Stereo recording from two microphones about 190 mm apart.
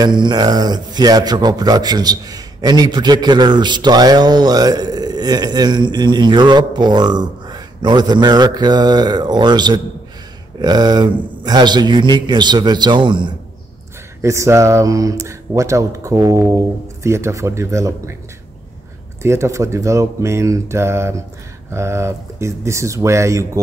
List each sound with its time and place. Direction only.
0.0 s speech: 20° right (ahead or behind)
19.2 s speech: 15° right (ahead or behind)